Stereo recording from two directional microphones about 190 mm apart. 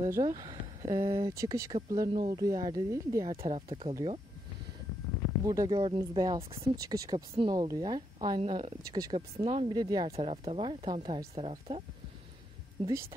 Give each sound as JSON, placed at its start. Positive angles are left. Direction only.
{"t": 0.0, "sound": "speech", "side_deg": -20}
{"t": 3.3, "sound": "speech", "side_deg": -30}
{"t": 5.4, "sound": "speech", "side_deg": -20}